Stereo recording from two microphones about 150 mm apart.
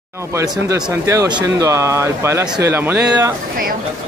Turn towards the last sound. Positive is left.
turn(degrees=-10)  # may be behind; listen again after turning